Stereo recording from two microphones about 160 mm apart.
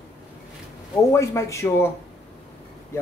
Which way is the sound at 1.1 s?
15° left (ahead or behind).